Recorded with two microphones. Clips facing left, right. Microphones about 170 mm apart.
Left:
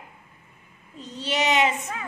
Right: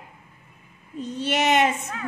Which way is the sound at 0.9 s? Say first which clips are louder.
Right 3 dB; 55° right (ahead or behind).